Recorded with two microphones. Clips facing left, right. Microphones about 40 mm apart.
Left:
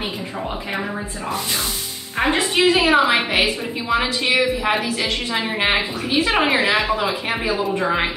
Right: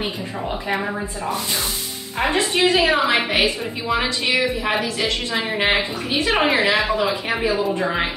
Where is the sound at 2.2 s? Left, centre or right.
Left.